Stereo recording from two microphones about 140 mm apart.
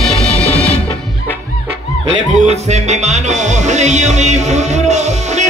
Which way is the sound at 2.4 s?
55° right (ahead or behind).